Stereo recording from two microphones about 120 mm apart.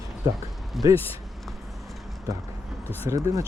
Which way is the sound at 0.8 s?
Centre (ahead or behind).